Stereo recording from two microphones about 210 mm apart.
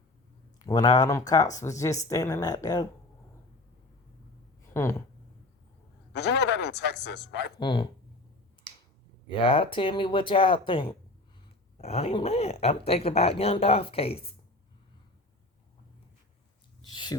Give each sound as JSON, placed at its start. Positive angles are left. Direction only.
{"t": 0.6, "sound": "speech", "side_deg": 20}
{"t": 4.7, "sound": "speech", "side_deg": 10}
{"t": 6.1, "sound": "speech", "side_deg": 55}
{"t": 7.6, "sound": "speech", "side_deg": 20}
{"t": 9.3, "sound": "speech", "side_deg": 25}
{"t": 16.8, "sound": "speech", "side_deg": 20}